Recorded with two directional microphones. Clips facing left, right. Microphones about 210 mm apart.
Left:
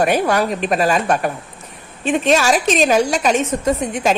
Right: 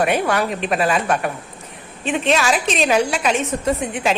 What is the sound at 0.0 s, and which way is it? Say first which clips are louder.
A woman's voice: left 2 dB; 40° left (ahead or behind).